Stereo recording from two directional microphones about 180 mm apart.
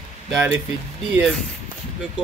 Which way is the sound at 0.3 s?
10° right (ahead or behind).